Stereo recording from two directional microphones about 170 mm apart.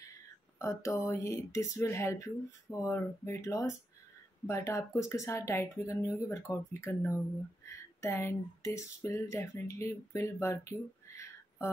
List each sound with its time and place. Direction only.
0.6 s speech: 15° left (ahead or behind)